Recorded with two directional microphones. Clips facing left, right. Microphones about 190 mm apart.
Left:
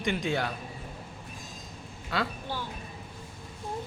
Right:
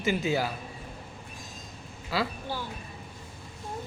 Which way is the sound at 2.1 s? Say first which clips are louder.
Right 1 dB; 5° right (ahead or behind).